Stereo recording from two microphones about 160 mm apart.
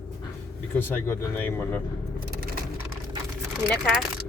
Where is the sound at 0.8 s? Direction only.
15° left (ahead or behind).